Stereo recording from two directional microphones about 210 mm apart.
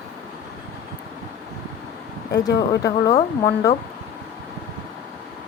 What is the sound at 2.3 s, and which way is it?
Speech, 15° left (ahead or behind).